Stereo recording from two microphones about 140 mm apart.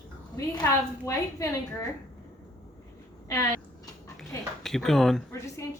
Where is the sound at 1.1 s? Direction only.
20° left (ahead or behind).